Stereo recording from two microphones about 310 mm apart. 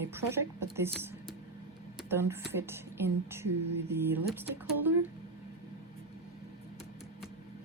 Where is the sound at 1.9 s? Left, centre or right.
Centre.